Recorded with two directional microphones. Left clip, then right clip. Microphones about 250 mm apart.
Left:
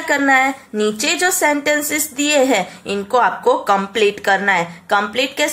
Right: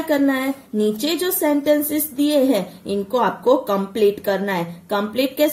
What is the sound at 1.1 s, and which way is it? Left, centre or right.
A woman's voice, left.